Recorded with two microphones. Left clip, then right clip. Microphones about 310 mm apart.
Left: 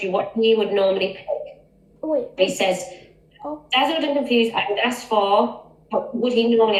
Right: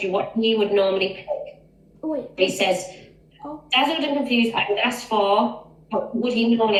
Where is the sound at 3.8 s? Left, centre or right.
Centre.